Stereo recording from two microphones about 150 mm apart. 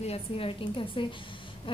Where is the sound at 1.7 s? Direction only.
35° left (ahead or behind).